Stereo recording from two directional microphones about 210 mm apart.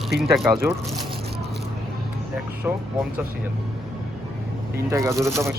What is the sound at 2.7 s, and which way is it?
Speech, 10° right (ahead or behind).